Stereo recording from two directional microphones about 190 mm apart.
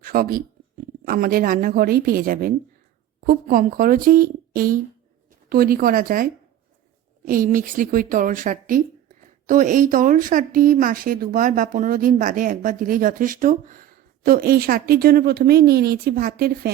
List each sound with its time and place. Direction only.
0.0 s speech: 50° right (ahead or behind)
7.3 s speech: 45° right (ahead or behind)